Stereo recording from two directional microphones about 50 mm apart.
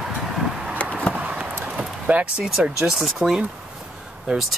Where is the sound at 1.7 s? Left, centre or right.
Right.